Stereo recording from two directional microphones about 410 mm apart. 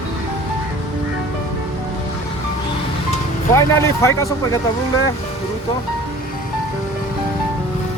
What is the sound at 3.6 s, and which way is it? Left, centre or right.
Speech, centre.